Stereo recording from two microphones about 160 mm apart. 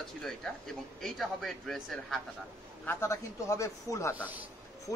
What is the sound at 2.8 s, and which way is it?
A man's voice, 15° left (ahead or behind).